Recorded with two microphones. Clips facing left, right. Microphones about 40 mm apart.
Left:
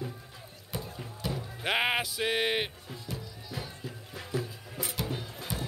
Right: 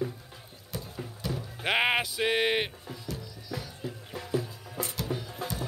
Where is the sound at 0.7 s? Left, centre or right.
Centre.